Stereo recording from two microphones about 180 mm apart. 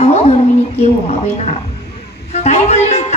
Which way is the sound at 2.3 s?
40° left (ahead or behind).